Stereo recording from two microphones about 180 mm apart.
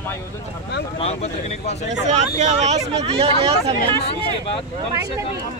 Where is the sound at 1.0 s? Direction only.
35° left (ahead or behind).